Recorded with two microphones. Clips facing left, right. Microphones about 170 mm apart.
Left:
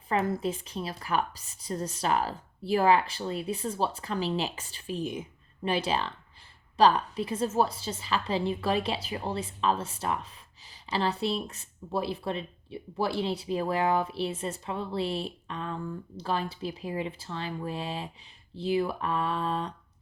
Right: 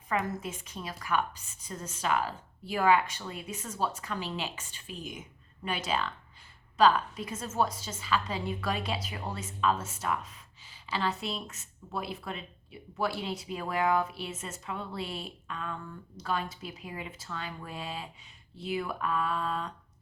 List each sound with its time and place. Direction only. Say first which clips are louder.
0.3 s a woman's voice: left 7 dB; 35° left (ahead or behind)